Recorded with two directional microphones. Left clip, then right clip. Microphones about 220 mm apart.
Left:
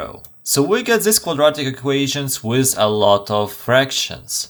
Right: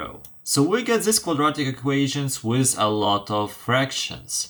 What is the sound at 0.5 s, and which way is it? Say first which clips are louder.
Speech: left 5 dB; 55° left (ahead or behind).